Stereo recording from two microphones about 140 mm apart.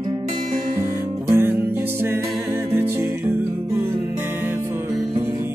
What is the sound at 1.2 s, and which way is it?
Music, 20° right (ahead or behind).